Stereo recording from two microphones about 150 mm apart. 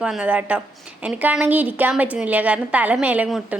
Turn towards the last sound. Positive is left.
turn(degrees=-10)  # may be behind; listen again after turning